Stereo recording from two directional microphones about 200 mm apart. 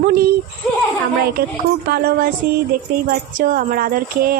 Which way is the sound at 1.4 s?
50° right (ahead or behind).